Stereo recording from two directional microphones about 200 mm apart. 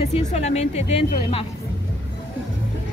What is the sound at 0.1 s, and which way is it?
Speech, 35° left (ahead or behind).